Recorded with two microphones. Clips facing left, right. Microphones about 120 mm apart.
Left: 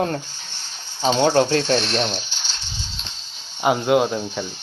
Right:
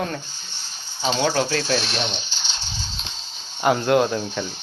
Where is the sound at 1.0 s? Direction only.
15° left (ahead or behind).